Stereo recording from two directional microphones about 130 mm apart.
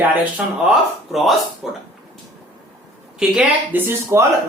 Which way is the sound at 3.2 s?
10° right (ahead or behind).